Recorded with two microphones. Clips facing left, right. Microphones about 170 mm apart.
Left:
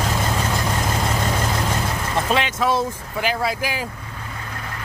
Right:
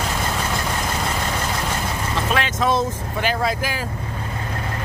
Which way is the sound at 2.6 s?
10° left (ahead or behind).